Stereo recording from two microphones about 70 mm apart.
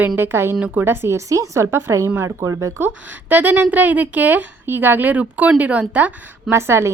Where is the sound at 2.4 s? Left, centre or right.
Right.